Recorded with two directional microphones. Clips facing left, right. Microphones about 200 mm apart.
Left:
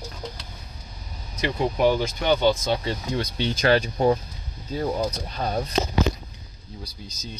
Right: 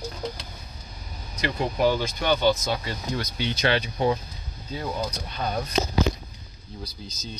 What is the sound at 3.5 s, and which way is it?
Speech, 45° left (ahead or behind).